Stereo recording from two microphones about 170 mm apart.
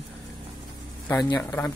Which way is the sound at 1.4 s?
10° left (ahead or behind).